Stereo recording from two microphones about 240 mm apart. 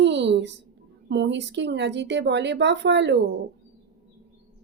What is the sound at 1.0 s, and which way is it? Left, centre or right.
Speech, right.